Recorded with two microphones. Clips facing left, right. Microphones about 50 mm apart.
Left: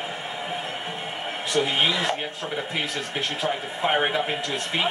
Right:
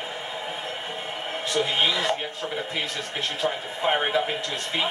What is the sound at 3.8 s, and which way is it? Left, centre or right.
Speech, centre.